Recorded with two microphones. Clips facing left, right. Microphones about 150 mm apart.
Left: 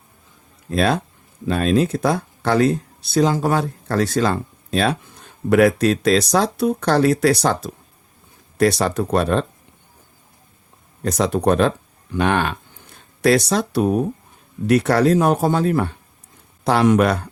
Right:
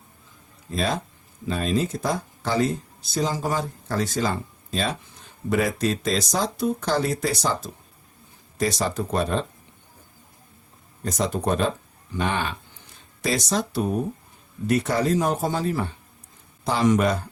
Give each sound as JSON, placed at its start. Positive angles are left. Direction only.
{"t": 0.7, "sound": "speech", "side_deg": 70}
{"t": 11.0, "sound": "speech", "side_deg": 70}